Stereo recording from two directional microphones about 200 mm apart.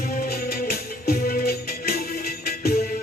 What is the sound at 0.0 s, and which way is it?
Music, 50° left (ahead or behind).